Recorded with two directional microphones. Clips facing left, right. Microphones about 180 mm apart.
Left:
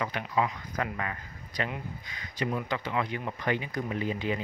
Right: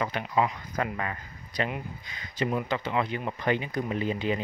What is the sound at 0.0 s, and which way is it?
Speech, 30° right (ahead or behind).